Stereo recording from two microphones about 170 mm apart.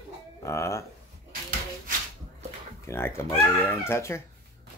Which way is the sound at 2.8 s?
15° left (ahead or behind).